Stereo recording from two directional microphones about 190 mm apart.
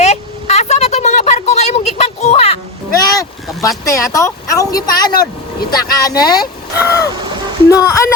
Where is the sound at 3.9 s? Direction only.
15° left (ahead or behind).